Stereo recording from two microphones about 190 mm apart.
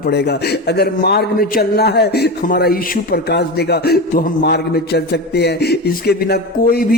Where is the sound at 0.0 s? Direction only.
60° left (ahead or behind).